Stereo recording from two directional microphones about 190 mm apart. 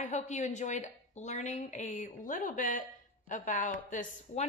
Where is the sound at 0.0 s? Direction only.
40° left (ahead or behind).